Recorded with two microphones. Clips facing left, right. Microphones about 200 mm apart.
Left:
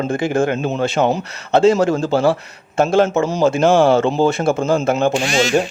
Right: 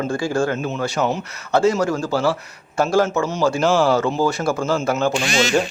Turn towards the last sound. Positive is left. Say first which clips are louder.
# left 4 dB
turn(degrees=20)  # may be behind; listen again after turning